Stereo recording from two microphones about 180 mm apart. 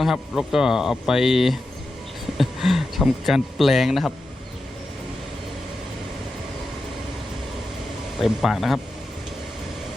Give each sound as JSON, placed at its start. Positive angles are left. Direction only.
{"t": 0.0, "sound": "speech", "side_deg": 0}
{"t": 8.2, "sound": "speech", "side_deg": 0}